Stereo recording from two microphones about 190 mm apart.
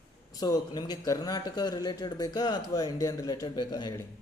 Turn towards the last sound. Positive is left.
turn(degrees=20)  # may be behind; listen again after turning